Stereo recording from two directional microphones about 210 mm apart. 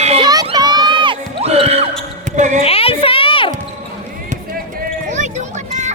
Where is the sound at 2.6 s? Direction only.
25° left (ahead or behind).